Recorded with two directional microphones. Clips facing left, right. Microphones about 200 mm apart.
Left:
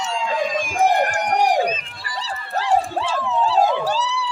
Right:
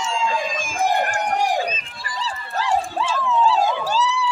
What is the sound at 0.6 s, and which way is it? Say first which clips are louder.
Run: left 4 dB; 65° left (ahead or behind).